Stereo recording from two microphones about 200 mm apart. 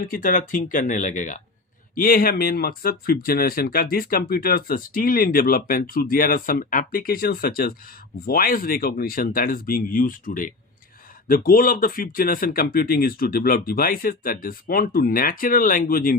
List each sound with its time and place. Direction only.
0.1 s speech: 45° left (ahead or behind)